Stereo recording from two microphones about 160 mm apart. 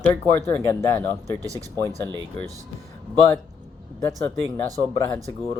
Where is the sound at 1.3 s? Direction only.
20° right (ahead or behind).